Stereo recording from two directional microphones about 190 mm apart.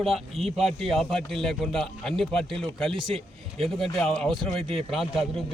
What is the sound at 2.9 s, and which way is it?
Speech, 25° right (ahead or behind).